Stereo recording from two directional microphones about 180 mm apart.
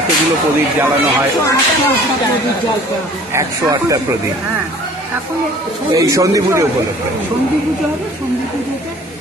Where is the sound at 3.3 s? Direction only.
20° right (ahead or behind).